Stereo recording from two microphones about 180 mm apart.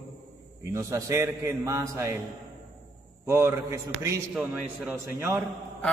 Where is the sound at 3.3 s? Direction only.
15° right (ahead or behind).